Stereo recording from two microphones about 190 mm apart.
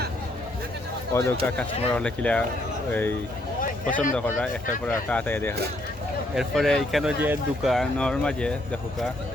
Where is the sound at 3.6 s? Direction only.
45° left (ahead or behind).